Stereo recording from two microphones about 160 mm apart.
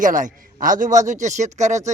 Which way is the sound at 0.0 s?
55° right (ahead or behind).